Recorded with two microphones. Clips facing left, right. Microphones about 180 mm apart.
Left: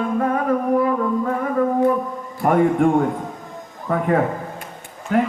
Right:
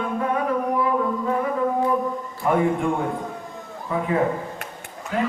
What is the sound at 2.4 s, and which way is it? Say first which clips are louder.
A man's voice: left 5 dB; 55° left (ahead or behind).